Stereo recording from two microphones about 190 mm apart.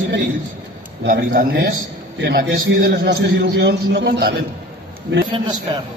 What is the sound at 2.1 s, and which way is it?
A man's voice, 65° right (ahead or behind).